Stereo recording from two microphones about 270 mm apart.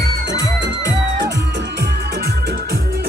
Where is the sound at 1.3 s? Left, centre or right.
Right.